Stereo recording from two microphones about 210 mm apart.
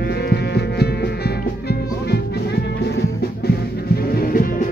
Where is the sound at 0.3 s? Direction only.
50° left (ahead or behind).